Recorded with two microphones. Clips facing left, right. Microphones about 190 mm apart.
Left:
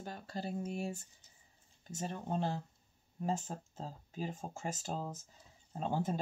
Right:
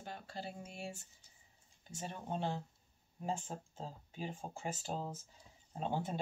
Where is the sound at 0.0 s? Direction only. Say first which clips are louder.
Left 4 dB; 40° left (ahead or behind).